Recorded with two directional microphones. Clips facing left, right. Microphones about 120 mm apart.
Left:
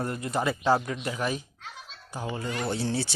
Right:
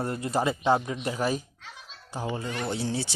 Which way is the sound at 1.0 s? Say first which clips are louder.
Right 2 dB; 35° right (ahead or behind).